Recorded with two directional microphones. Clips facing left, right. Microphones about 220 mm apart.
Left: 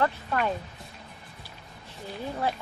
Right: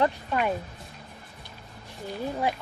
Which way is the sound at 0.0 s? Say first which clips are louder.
Right 2 dB; 15° right (ahead or behind).